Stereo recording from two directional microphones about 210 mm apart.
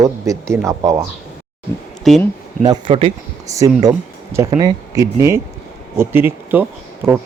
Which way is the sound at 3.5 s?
15° right (ahead or behind).